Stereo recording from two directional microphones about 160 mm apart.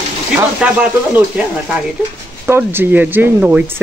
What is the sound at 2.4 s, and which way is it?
Speech, 15° right (ahead or behind).